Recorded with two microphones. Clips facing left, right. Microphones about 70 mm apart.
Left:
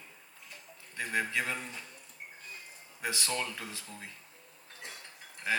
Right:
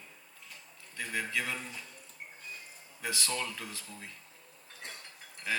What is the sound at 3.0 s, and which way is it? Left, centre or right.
Speech, left.